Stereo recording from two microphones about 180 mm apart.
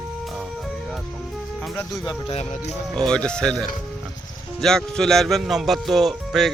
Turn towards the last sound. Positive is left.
turn(degrees=0)  # may be behind; listen again after turning